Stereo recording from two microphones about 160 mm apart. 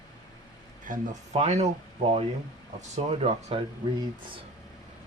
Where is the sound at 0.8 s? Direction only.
55° right (ahead or behind).